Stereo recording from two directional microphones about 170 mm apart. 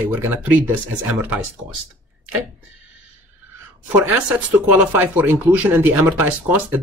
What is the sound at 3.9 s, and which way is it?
Speech, 10° right (ahead or behind).